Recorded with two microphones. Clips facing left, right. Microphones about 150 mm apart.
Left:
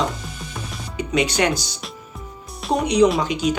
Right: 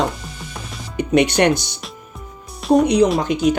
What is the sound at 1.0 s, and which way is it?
Speech, 55° right (ahead or behind).